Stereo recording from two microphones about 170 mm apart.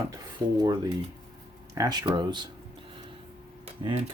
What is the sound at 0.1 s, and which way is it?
Speech, 25° right (ahead or behind).